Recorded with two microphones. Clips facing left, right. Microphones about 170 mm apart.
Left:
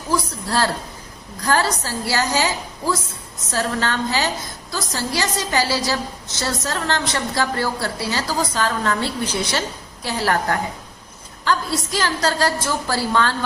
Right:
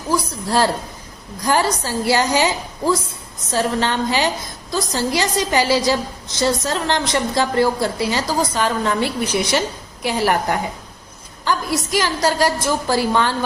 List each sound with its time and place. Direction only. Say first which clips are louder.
0.1 s a woman's voice: right 2 dB; 15° right (ahead or behind)